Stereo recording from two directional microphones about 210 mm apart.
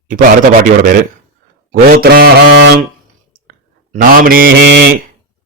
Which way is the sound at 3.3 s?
45° right (ahead or behind).